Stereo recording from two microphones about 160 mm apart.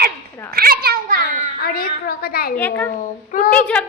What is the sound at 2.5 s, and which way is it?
Speech, 10° left (ahead or behind).